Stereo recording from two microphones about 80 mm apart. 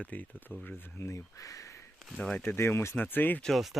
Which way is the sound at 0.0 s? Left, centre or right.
Centre.